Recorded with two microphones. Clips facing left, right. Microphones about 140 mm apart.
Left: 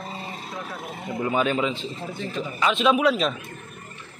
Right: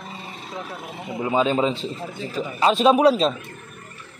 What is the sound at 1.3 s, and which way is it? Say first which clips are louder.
A man's voice: right 4 dB; 25° right (ahead or behind).